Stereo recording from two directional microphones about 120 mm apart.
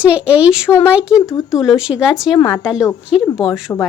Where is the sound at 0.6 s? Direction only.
20° left (ahead or behind).